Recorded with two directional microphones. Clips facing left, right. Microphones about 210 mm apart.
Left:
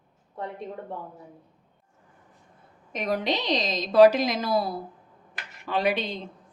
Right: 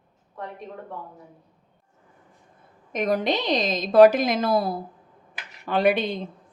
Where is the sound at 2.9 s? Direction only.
45° right (ahead or behind).